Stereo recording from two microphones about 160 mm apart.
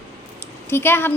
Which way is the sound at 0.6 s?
15° left (ahead or behind).